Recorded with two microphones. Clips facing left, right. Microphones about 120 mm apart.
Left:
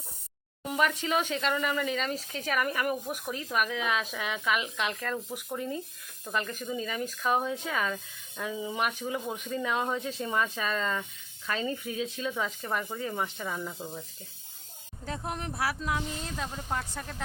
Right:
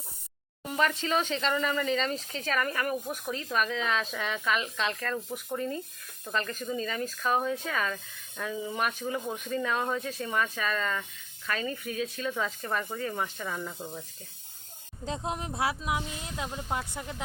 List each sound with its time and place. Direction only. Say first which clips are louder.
0.7 s speech: even; 10° left (ahead or behind)
15.0 s speech: right 2 dB; 20° right (ahead or behind)